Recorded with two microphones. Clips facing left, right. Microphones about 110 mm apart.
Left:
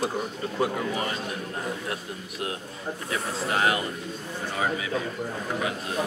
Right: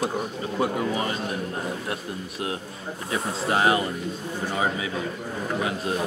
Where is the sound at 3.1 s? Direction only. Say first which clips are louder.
Right 4 dB; 25° right (ahead or behind).